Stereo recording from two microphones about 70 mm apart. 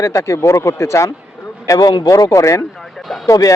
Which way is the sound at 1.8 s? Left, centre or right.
Left.